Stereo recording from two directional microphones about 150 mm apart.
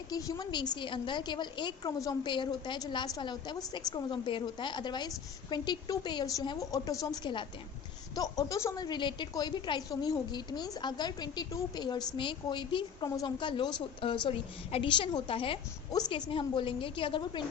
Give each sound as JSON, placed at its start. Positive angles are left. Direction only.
{"t": 0.1, "sound": "a woman's voice", "side_deg": 25}
{"t": 8.1, "sound": "a woman's voice", "side_deg": 25}